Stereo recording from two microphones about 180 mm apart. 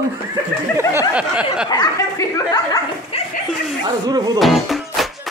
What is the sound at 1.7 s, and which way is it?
Speech, 20° left (ahead or behind).